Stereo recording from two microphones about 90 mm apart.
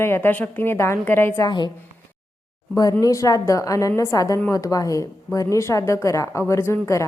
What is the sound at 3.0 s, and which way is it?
A woman's voice, 40° left (ahead or behind).